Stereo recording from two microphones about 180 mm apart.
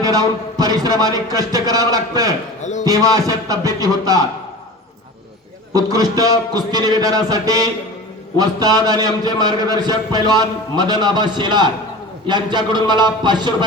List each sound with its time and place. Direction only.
0.0 s a man's voice: 20° right (ahead or behind)
2.6 s chop: 40° left (ahead or behind)
2.8 s a man's voice: 20° right (ahead or behind)
5.7 s a man's voice: 20° right (ahead or behind)